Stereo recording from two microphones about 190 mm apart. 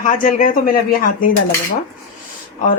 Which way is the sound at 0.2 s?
45° left (ahead or behind).